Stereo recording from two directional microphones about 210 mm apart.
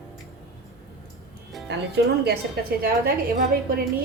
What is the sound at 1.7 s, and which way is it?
Speech, 50° right (ahead or behind).